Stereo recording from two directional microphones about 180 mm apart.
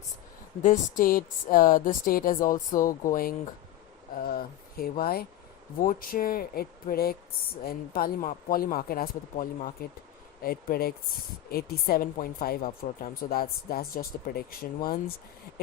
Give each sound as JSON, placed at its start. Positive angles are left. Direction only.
{"t": 0.6, "sound": "a woman's voice", "side_deg": 45}